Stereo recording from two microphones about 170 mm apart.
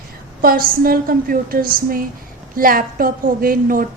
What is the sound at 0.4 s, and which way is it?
A woman's voice, 60° right (ahead or behind).